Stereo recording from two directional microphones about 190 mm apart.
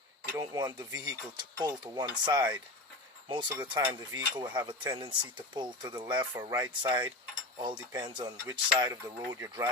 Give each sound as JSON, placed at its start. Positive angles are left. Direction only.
{"t": 0.3, "sound": "speech", "side_deg": -20}